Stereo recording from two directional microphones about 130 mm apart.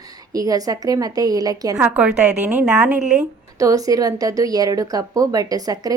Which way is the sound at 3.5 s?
25° right (ahead or behind).